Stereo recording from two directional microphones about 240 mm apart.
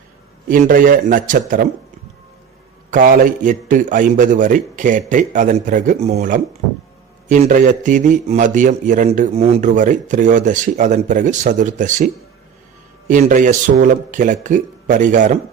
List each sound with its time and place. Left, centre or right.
0.4 s a man's voice: right
2.9 s a man's voice: right